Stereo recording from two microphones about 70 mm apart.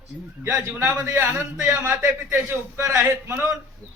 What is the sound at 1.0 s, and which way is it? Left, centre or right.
Speech, right.